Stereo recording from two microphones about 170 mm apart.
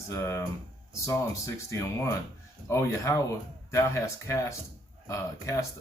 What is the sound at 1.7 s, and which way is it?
Speech, 20° left (ahead or behind).